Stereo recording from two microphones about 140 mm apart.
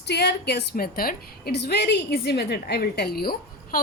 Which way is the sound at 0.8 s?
90° left.